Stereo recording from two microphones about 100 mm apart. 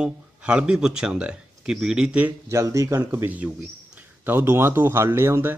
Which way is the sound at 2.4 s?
30° right (ahead or behind).